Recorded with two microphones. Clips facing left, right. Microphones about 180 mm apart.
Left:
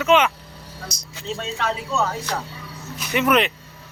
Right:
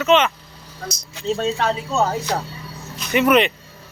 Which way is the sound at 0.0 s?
10° left (ahead or behind).